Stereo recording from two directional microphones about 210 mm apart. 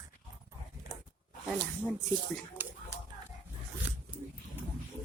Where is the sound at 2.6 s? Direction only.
10° right (ahead or behind).